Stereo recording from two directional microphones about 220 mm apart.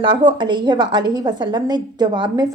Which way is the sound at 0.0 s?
20° right (ahead or behind).